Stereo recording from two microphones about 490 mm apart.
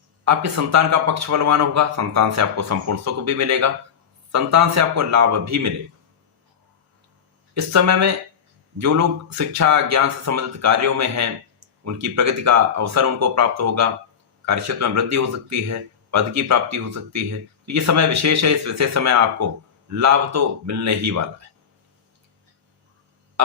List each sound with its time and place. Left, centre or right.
0.3 s speech: right
7.5 s speech: right